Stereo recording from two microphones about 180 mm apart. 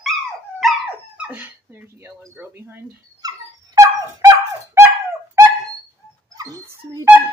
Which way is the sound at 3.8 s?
15° right (ahead or behind).